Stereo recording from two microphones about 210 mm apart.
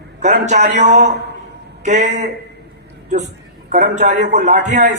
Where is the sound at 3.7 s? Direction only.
35° right (ahead or behind).